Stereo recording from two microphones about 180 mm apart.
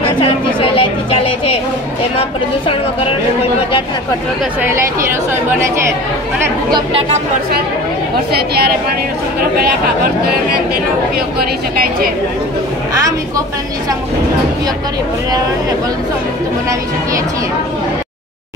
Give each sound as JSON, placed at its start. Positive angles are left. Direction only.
{"t": 0.2, "sound": "a sound", "side_deg": 30}
{"t": 4.6, "sound": "speech", "side_deg": -10}
{"t": 6.7, "sound": "speech", "side_deg": -30}